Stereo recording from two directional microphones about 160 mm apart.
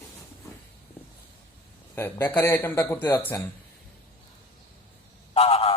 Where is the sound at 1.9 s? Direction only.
15° left (ahead or behind).